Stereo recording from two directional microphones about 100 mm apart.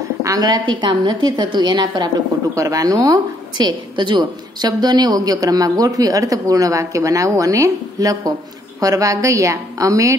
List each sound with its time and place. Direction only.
0.2 s a woman's voice: 40° right (ahead or behind)
0.7 s a woman's voice: 50° right (ahead or behind)
2.5 s a woman's voice: 35° right (ahead or behind)